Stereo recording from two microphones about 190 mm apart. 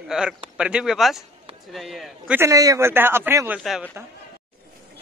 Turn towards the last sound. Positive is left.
turn(degrees=0)  # may be behind; listen again after turning